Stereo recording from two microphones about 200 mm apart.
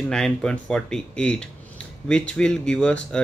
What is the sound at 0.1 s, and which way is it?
Speech, 5° left (ahead or behind).